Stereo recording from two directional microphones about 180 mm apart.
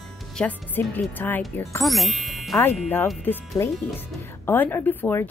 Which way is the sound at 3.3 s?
15° left (ahead or behind).